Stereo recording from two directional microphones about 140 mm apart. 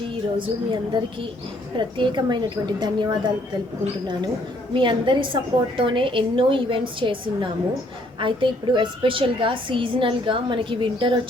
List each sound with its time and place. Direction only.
0.3 s a woman's voice: 35° right (ahead or behind)